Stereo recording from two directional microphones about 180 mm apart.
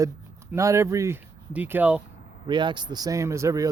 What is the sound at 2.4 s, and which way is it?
Speech, 25° right (ahead or behind).